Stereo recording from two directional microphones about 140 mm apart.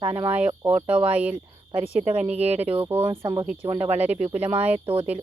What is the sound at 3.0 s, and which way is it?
Speech, 35° right (ahead or behind).